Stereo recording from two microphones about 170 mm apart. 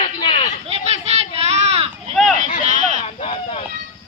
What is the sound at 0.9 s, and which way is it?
Child singing, 40° right (ahead or behind).